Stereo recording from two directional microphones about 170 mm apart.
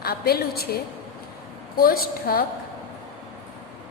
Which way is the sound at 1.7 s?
60° left (ahead or behind).